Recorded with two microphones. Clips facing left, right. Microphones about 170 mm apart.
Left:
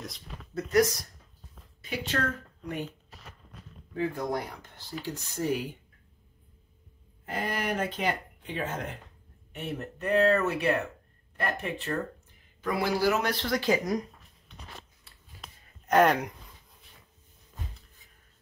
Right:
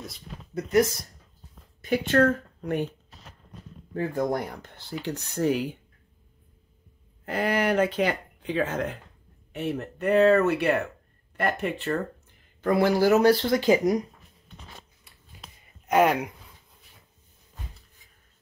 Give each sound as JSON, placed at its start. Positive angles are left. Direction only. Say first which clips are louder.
{"t": 0.7, "sound": "speech", "louder": "right 2 dB", "side_deg": -25}
{"t": 1.8, "sound": "speech", "louder": "right 10 dB", "side_deg": -55}
{"t": 3.9, "sound": "speech", "louder": "right 4 dB", "side_deg": -50}
{"t": 7.2, "sound": "speech", "louder": "right 7 dB", "side_deg": -70}
{"t": 9.9, "sound": "speech", "louder": "right 5 dB", "side_deg": -70}
{"t": 12.6, "sound": "speech", "louder": "right 6 dB", "side_deg": -50}
{"t": 13.2, "sound": "speech", "louder": "right 9 dB", "side_deg": -30}
{"t": 15.1, "sound": "a sound", "louder": "right 1 dB", "side_deg": -15}
{"t": 15.9, "sound": "speech", "louder": "right 1 dB", "side_deg": -10}